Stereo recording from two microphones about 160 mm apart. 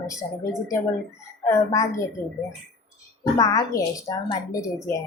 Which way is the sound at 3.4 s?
20° left (ahead or behind).